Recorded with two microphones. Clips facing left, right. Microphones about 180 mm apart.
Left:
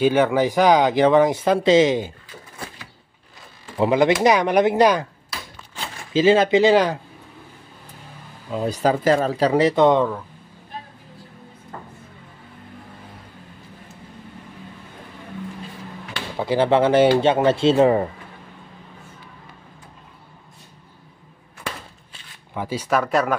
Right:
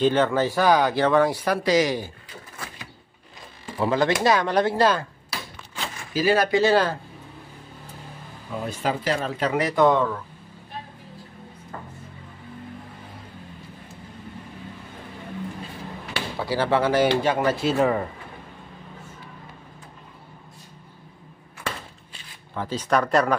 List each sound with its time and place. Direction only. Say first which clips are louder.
0.0 s speech: left 3 dB; 10° left (ahead or behind)
3.7 s speech: left 5 dB; 20° left (ahead or behind)
6.1 s speech: left 5 dB; 25° left (ahead or behind)
8.6 s speech: left 7 dB; 40° left (ahead or behind); by 10.2 s 15° left (ahead or behind)
16.3 s speech: left 5 dB; 20° left (ahead or behind)
22.5 s speech: left 1 dB; 10° left (ahead or behind)